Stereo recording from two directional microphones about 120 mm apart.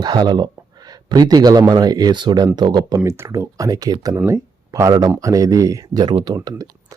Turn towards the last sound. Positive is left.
turn(degrees=-30)  # may be behind; listen again after turning